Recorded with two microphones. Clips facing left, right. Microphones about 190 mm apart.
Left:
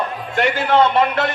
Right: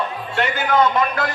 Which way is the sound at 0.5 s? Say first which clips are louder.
Left 2 dB; 30° left (ahead or behind).